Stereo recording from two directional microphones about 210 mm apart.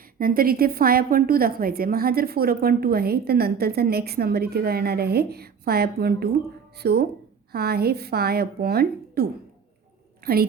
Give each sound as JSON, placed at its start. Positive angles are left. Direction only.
{"t": 0.2, "sound": "a woman's voice", "side_deg": -45}
{"t": 10.3, "sound": "a woman's voice", "side_deg": -45}